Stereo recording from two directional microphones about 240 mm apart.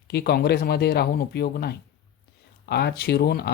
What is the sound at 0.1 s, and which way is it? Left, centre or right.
Speech, left.